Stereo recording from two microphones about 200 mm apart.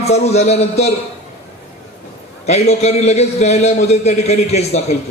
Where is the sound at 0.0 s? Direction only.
30° left (ahead or behind).